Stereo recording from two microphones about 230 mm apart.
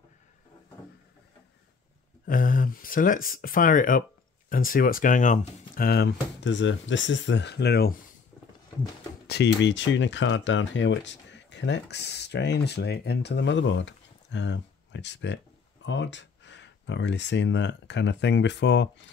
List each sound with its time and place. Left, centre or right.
2.2 s speech: left
9.3 s speech: left